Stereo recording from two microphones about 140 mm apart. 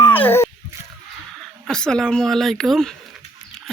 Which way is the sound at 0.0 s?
15° left (ahead or behind).